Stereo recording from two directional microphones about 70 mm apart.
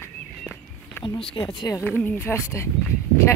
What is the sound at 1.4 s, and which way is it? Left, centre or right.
Speech, left.